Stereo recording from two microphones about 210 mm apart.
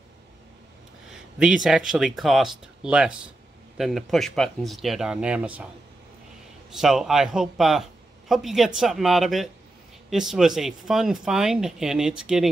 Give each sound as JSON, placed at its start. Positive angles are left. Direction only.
{"t": 1.1, "sound": "speech", "side_deg": -5}
{"t": 6.7, "sound": "speech", "side_deg": 0}